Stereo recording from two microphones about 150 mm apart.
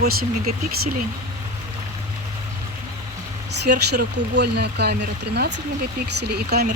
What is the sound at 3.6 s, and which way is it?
Speech, 90° right.